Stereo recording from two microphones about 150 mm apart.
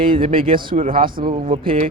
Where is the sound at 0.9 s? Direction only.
70° right (ahead or behind).